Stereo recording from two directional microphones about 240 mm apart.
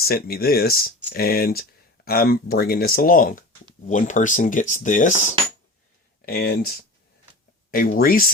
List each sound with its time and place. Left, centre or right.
0.0 s speech: left
7.7 s speech: left